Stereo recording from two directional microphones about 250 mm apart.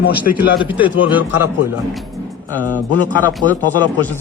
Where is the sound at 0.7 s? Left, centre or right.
Centre.